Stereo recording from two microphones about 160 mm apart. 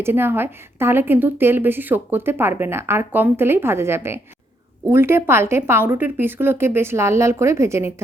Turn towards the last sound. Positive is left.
turn(degrees=-15)  # may be behind; listen again after turning